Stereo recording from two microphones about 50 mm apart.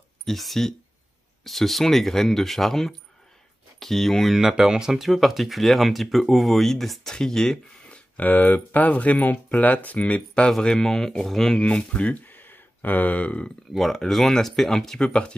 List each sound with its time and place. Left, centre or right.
0.2 s speech: centre
4.4 s speech: centre
7.9 s speech: left
10.6 s speech: centre
11.5 s speech: centre
12.3 s a sound: left
13.7 s speech: centre
15.0 s speech: centre